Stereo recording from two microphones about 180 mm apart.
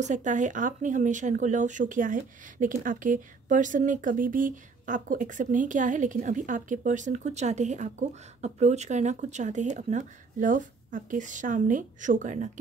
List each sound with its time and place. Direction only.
0.0 s speech: 45° right (ahead or behind)